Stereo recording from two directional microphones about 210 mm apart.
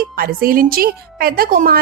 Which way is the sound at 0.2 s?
45° right (ahead or behind).